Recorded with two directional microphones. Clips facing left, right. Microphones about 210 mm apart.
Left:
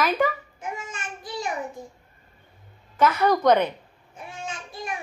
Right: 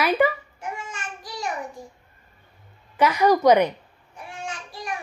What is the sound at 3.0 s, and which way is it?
Speech, 10° right (ahead or behind).